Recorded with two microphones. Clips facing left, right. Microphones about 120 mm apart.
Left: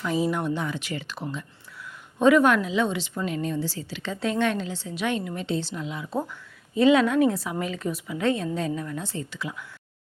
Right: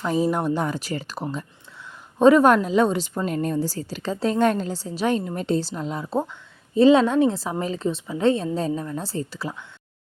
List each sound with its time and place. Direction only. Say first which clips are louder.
0.0 s a woman's voice: right 3 dB; 40° right (ahead or behind)